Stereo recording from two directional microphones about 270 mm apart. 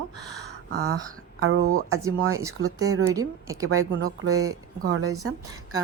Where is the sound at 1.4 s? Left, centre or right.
Right.